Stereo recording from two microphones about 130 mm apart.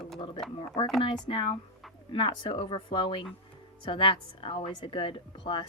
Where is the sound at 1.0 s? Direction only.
45° left (ahead or behind).